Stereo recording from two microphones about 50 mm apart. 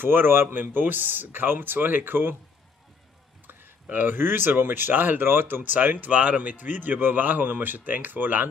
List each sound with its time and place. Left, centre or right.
0.0 s speech: right
3.9 s speech: right